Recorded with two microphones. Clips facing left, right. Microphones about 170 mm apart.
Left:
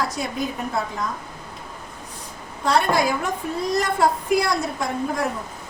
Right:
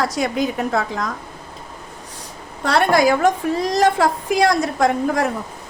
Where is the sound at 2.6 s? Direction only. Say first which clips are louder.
Right 4 dB; 75° right (ahead or behind).